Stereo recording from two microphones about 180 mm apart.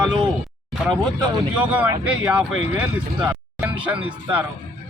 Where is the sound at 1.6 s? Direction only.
10° right (ahead or behind).